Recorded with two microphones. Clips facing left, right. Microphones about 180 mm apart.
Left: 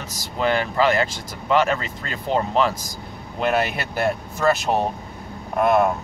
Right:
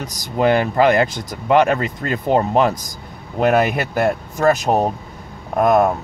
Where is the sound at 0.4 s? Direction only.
50° right (ahead or behind).